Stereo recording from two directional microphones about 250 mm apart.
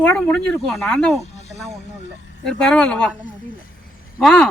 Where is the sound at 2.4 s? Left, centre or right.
Centre.